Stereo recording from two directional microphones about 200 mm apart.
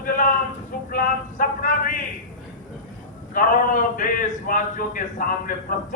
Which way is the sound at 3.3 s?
40° left (ahead or behind).